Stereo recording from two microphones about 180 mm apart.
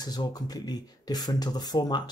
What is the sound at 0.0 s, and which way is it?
Speech, 20° left (ahead or behind).